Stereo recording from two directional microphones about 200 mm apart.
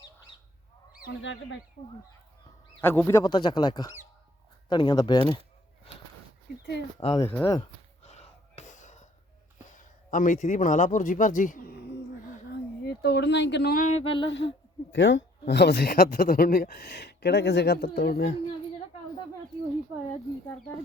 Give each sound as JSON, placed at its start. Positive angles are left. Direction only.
{"t": 1.0, "sound": "speech", "side_deg": 65}
{"t": 2.8, "sound": "speech", "side_deg": 10}
{"t": 7.0, "sound": "speech", "side_deg": 30}
{"t": 7.3, "sound": "speech", "side_deg": 10}
{"t": 7.6, "sound": "a sound", "side_deg": 30}
{"t": 9.7, "sound": "a man's voice", "side_deg": 40}
{"t": 12.8, "sound": "speech", "side_deg": 55}
{"t": 14.3, "sound": "speech", "side_deg": 65}